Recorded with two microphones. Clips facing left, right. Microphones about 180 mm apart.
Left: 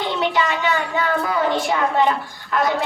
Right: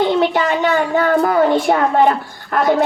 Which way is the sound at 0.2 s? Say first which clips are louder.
Right 5 dB; 50° right (ahead or behind).